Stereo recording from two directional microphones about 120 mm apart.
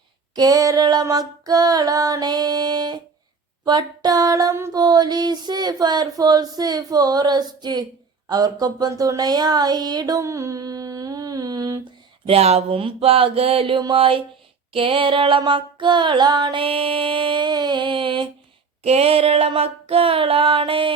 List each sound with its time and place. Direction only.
0.3 s a sound: 30° right (ahead or behind)
8.3 s speech: 35° right (ahead or behind)
12.2 s child singing: 55° right (ahead or behind)
18.8 s child singing: 60° right (ahead or behind)